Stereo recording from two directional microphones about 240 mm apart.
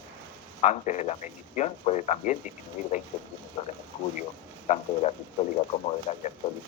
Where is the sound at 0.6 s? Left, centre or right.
Left.